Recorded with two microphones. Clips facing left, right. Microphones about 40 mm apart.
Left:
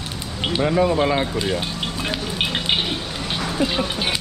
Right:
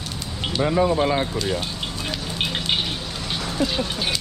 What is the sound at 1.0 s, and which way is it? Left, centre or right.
Speech, left.